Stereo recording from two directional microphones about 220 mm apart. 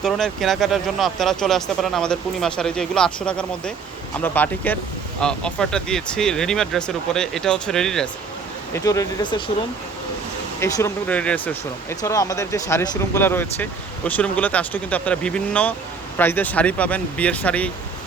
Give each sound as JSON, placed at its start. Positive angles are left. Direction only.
{"t": 0.0, "sound": "speech", "side_deg": 0}
{"t": 8.7, "sound": "speech", "side_deg": 15}
{"t": 10.6, "sound": "speech", "side_deg": 15}